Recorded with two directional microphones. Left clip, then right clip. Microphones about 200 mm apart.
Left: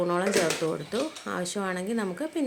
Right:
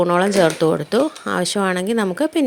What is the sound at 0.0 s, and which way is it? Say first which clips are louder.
Speech: right 10 dB; 40° right (ahead or behind).